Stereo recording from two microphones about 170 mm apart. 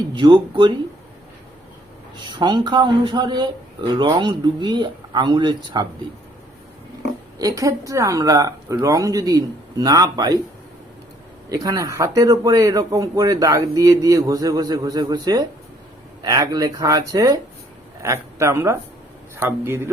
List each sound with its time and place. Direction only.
0.1 s speech: 30° right (ahead or behind)
2.2 s speech: 25° right (ahead or behind)
7.3 s speech: 20° right (ahead or behind)
11.4 s a man's voice: 20° right (ahead or behind)